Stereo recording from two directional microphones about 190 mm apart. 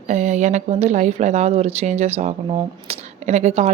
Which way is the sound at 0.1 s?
35° right (ahead or behind).